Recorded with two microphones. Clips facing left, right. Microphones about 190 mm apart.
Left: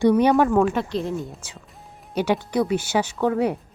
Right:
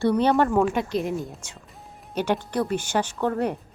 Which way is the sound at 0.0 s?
10° left (ahead or behind).